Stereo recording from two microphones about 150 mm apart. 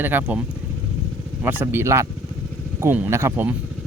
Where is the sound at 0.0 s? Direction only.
15° right (ahead or behind).